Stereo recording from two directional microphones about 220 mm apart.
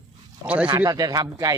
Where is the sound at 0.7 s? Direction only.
15° right (ahead or behind).